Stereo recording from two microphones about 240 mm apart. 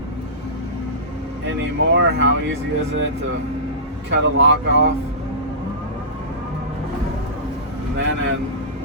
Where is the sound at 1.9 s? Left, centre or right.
Right.